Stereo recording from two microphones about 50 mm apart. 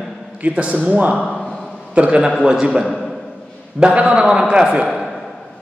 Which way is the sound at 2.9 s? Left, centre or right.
Centre.